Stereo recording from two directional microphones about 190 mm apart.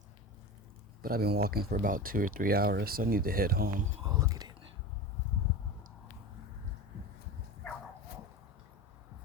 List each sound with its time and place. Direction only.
1.0 s speech: 55° right (ahead or behind)
4.0 s speech: 20° right (ahead or behind)